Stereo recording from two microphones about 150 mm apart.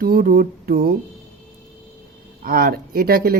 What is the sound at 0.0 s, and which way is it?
Speech, 90° right.